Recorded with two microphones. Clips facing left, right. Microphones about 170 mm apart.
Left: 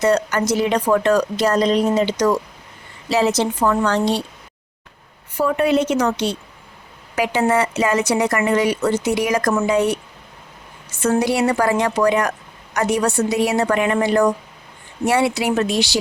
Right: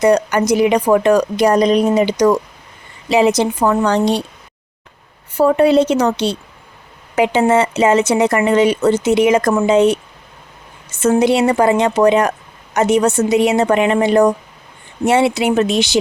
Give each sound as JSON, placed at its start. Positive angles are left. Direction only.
{"t": 0.0, "sound": "a woman's voice", "side_deg": -15}
{"t": 5.3, "sound": "speech", "side_deg": -30}